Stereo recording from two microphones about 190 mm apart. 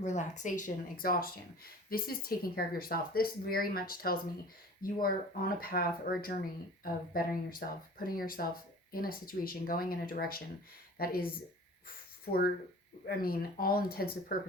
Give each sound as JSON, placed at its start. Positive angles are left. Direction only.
{"t": 0.0, "sound": "speech", "side_deg": 40}